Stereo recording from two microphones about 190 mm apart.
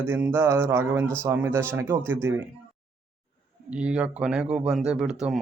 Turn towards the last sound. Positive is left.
turn(degrees=-5)  # may be behind; listen again after turning